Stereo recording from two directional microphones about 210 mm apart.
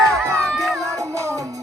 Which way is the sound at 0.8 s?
15° right (ahead or behind).